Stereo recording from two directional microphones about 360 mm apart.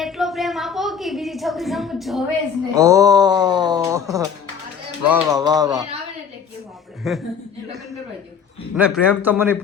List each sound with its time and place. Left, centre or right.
0.0 s a sound: centre
2.7 s speech: centre
7.1 s a man's voice: centre
8.7 s a man's voice: centre